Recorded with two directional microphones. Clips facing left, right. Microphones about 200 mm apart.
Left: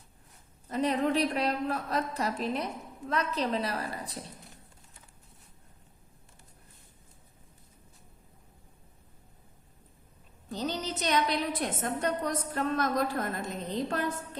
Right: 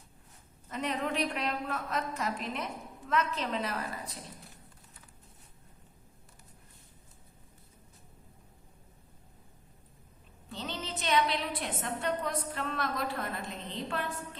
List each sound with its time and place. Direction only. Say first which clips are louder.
0.7 s a woman's voice: left 6 dB; 35° left (ahead or behind)
10.5 s a woman's voice: left 6 dB; 40° left (ahead or behind)